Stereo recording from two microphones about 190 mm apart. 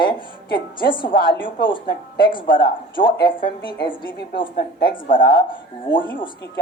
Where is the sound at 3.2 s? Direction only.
50° left (ahead or behind).